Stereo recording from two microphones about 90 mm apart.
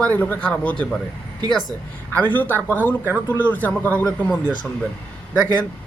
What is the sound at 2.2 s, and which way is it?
Speech, 20° left (ahead or behind).